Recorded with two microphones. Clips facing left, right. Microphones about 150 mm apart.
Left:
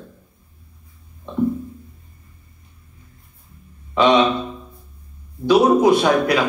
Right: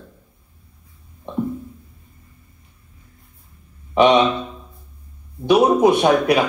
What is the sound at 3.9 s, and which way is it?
Speech, 15° right (ahead or behind).